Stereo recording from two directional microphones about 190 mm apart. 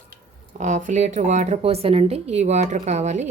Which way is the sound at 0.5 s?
40° right (ahead or behind).